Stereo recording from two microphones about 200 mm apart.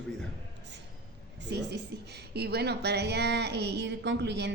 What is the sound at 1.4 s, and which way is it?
A woman's voice, 60° right (ahead or behind).